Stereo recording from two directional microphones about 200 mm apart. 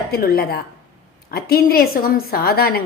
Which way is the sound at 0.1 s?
50° left (ahead or behind).